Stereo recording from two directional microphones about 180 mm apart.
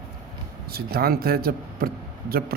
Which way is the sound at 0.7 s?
55° right (ahead or behind).